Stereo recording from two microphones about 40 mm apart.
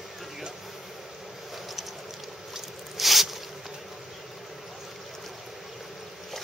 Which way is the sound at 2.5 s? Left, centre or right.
Centre.